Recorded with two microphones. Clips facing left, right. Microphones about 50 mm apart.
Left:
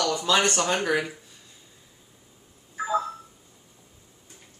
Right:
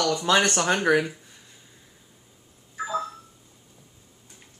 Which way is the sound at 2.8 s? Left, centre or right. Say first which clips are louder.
Left 3 dB; centre.